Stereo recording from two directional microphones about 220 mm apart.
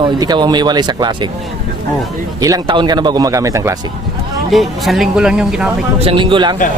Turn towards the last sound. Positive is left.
turn(degrees=-20)  # may be behind; listen again after turning